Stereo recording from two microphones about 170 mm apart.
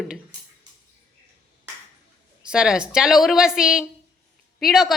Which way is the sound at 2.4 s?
5° right (ahead or behind).